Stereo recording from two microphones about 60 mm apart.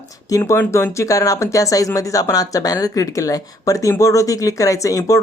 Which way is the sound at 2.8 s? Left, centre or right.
Left.